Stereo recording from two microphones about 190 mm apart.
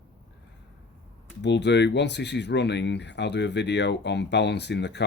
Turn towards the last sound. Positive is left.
turn(degrees=65)  # may be behind; listen again after turning